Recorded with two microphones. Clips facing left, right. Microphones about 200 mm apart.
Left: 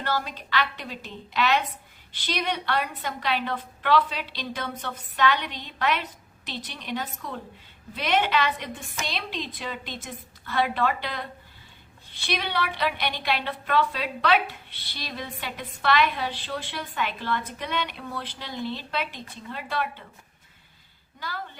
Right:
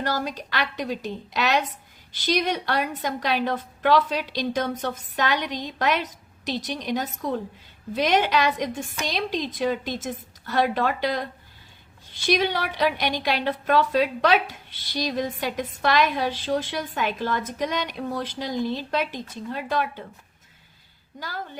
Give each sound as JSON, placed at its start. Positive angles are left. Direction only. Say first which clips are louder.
{"t": 0.0, "sound": "a woman's voice", "louder": "right 2 dB", "side_deg": -40}
{"t": 21.2, "sound": "a woman's voice", "louder": "right 2 dB", "side_deg": -45}